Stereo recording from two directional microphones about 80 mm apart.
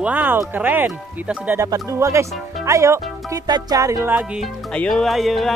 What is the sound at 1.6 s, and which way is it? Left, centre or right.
Speech, right.